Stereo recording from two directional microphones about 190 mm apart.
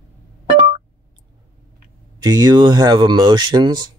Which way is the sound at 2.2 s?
20° right (ahead or behind).